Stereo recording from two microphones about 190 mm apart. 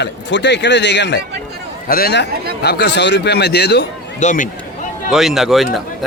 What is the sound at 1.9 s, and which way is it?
A man's voice, 50° left (ahead or behind).